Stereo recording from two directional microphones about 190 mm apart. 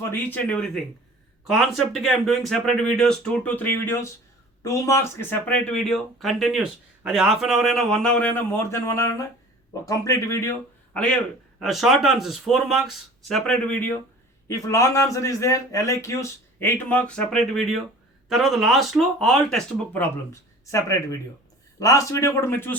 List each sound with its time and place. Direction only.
0.0 s a man's voice: 10° left (ahead or behind)
20.7 s a man's voice: 15° left (ahead or behind)